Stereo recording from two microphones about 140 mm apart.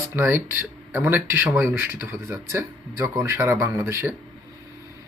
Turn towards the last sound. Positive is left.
turn(degrees=-15)  # may be behind; listen again after turning